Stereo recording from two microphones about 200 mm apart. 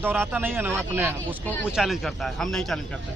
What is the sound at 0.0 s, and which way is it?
Speech, 10° right (ahead or behind).